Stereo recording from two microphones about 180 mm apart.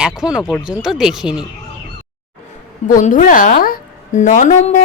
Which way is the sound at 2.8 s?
45° left (ahead or behind).